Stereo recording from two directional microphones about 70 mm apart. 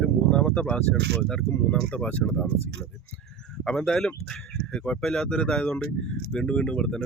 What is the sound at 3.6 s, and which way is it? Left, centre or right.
Speech, centre.